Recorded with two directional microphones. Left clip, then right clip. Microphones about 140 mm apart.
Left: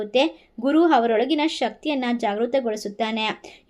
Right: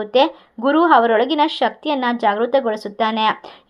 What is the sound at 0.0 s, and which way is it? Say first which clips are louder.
A woman's voice: right 5 dB; 15° left (ahead or behind).